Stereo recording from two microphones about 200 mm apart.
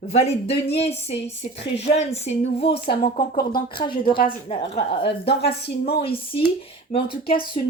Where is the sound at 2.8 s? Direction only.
50° left (ahead or behind).